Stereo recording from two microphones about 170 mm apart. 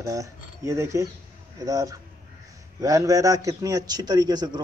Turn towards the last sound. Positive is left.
turn(degrees=-25)  # may be behind; listen again after turning